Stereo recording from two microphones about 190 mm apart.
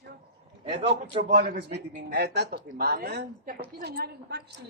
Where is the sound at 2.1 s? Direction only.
60° right (ahead or behind).